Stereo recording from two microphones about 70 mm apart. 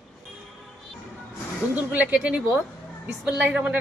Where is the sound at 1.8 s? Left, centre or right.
Centre.